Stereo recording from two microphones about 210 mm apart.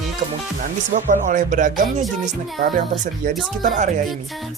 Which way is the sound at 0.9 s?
35° right (ahead or behind).